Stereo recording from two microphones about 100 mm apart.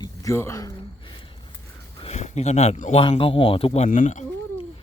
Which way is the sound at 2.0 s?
90° left.